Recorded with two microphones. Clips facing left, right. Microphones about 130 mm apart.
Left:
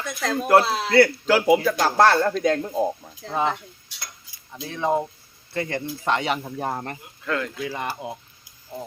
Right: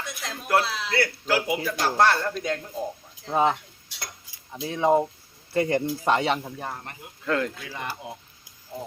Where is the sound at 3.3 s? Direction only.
10° right (ahead or behind).